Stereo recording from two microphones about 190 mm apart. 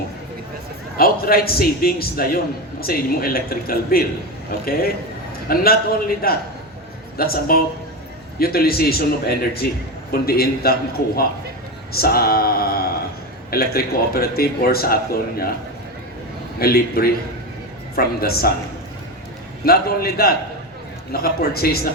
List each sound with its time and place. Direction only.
0.9 s a man's voice: 50° left (ahead or behind)
5.5 s a man's voice: 50° left (ahead or behind)
11.9 s a sound: 55° left (ahead or behind)
13.5 s a man's voice: 55° left (ahead or behind)
16.6 s a man's voice: 55° left (ahead or behind)
19.6 s a man's voice: 55° left (ahead or behind)